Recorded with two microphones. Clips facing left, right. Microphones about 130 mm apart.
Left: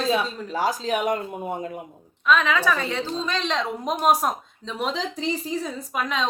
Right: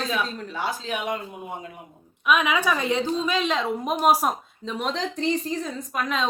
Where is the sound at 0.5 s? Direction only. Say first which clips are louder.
Left 6 dB; 40° left (ahead or behind).